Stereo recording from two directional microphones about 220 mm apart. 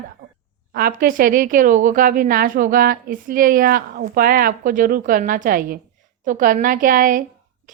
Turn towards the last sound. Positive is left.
turn(degrees=-40)  # may be behind; listen again after turning